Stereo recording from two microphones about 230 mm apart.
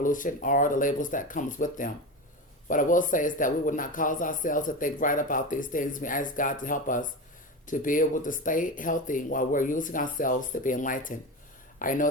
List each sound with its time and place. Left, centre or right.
0.0 s speech: left